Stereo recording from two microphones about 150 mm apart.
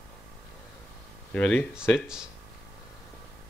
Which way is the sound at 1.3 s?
5° left (ahead or behind).